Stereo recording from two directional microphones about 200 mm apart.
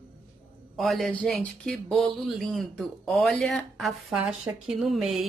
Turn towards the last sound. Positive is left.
turn(degrees=0)  # may be behind; listen again after turning